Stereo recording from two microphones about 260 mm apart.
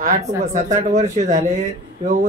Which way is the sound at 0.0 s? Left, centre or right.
Right.